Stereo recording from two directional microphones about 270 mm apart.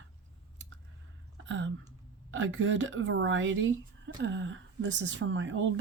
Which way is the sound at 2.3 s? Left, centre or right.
Right.